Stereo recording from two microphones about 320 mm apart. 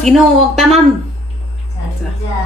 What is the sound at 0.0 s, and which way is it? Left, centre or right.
Speech, centre.